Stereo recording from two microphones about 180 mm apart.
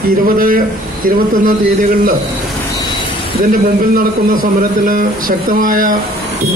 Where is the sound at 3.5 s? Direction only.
50° right (ahead or behind).